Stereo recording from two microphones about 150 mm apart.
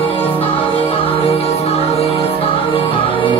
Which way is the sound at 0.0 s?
35° left (ahead or behind).